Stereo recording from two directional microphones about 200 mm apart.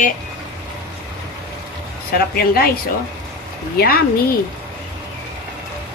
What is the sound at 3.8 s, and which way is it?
Speech, 50° left (ahead or behind).